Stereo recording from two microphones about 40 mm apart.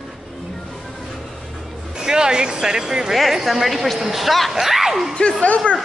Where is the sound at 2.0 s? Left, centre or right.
Centre.